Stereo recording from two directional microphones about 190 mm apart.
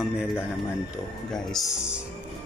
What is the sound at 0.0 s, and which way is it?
Speech, 5° right (ahead or behind).